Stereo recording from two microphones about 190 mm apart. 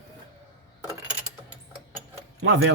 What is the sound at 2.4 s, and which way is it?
Speech, 90° right.